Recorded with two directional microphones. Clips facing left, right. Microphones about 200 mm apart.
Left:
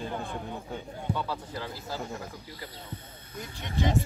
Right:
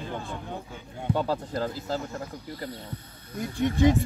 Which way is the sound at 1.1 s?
50° right (ahead or behind).